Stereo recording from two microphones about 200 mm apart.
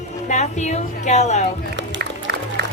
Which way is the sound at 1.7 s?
60° right (ahead or behind).